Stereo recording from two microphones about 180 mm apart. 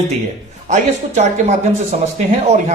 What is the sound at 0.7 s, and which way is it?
Speech, 40° right (ahead or behind).